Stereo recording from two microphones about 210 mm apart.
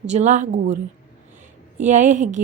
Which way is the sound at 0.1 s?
35° right (ahead or behind).